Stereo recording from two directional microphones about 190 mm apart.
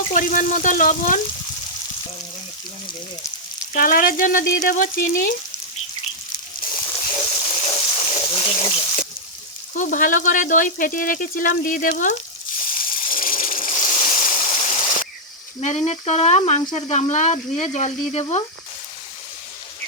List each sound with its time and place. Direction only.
0.1 s speech: 45° left (ahead or behind)
3.7 s speech: 45° left (ahead or behind)
6.8 s a sound: 25° left (ahead or behind)
9.7 s speech: 45° left (ahead or behind)
12.6 s a sound: 50° left (ahead or behind)
15.6 s frying: 35° left (ahead or behind)